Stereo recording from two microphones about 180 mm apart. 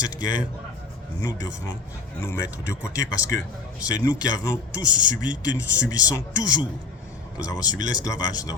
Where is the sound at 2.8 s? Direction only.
20° left (ahead or behind).